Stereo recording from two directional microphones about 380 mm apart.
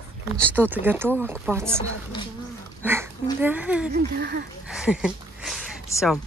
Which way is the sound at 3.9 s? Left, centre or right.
Right.